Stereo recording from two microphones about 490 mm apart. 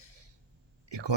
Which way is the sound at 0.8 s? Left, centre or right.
Right.